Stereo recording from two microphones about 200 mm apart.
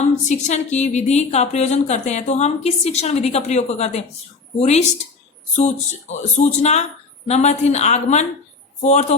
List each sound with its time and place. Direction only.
0.3 s a woman's voice: 35° left (ahead or behind)